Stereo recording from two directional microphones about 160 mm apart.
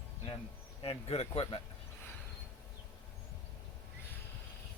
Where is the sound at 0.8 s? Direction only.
40° left (ahead or behind).